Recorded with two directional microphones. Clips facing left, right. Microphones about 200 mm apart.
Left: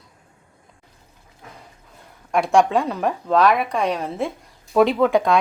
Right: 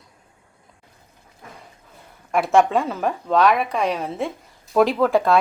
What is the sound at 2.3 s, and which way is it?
Speech, centre (ahead or behind).